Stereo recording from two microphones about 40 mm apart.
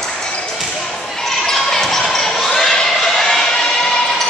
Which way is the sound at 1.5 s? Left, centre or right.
Centre.